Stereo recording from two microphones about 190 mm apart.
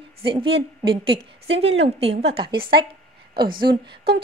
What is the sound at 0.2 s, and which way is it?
A woman's voice, 30° right (ahead or behind).